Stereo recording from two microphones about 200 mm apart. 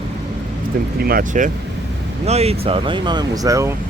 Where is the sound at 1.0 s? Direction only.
45° right (ahead or behind); by 3.7 s 15° right (ahead or behind).